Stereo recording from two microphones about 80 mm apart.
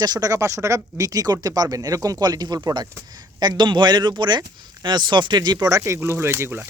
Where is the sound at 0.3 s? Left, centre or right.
Right.